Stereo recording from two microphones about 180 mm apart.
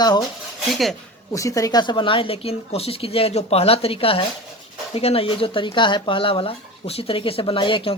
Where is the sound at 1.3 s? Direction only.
15° left (ahead or behind).